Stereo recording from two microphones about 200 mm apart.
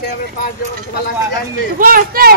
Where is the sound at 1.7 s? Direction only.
45° right (ahead or behind).